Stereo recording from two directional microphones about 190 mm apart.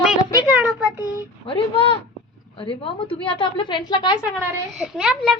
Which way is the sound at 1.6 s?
30° left (ahead or behind).